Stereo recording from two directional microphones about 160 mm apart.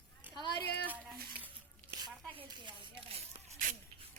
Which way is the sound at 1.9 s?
25° right (ahead or behind).